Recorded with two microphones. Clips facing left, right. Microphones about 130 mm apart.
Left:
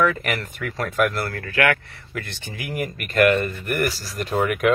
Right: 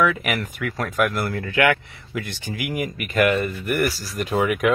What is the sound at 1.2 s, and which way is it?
Speech, 20° right (ahead or behind).